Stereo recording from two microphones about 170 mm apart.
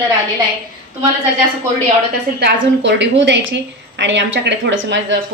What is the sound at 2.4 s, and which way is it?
Speech, 80° right.